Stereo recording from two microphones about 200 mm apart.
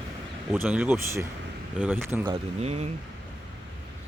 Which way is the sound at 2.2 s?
30° right (ahead or behind).